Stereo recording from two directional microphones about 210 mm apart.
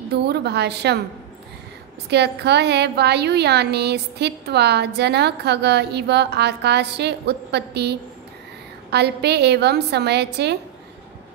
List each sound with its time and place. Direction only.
0.1 s a woman's voice: 50° right (ahead or behind)
2.0 s a woman's voice: 50° right (ahead or behind)